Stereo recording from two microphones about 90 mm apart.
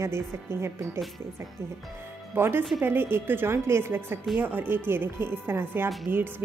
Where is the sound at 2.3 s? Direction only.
25° right (ahead or behind).